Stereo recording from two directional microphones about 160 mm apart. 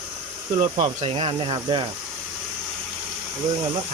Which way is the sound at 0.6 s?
40° right (ahead or behind).